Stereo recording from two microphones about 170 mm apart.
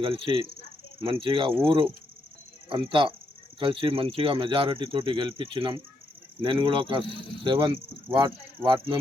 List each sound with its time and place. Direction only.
0.0 s speech: 30° right (ahead or behind)